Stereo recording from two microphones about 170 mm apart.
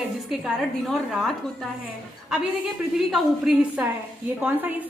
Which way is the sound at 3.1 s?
Centre (ahead or behind).